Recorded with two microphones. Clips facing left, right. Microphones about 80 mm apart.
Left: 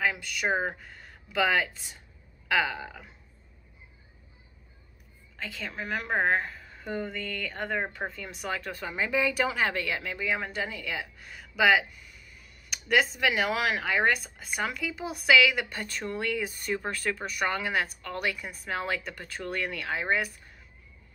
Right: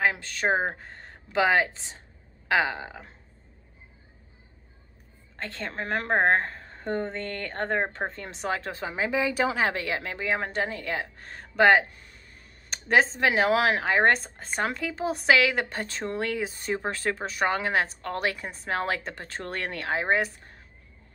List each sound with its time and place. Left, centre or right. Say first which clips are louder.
0.1 s a woman's voice: right 3 dB; right
5.6 s a woman's voice: right 4 dB; right